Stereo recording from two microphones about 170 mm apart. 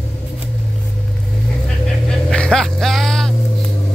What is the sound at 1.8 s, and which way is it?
Vehicle, 5° left (ahead or behind).